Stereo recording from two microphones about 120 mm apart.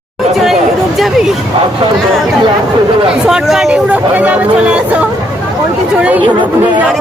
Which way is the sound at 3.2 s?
5° right (ahead or behind).